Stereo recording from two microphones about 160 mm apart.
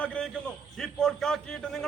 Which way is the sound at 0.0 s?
5° left (ahead or behind).